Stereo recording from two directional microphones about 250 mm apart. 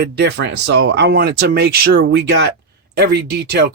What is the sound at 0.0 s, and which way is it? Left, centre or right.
Speech, right.